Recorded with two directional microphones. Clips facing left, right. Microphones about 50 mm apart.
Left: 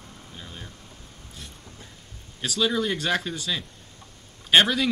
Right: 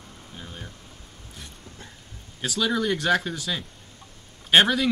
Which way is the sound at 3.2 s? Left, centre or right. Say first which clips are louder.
Right 1 dB; centre.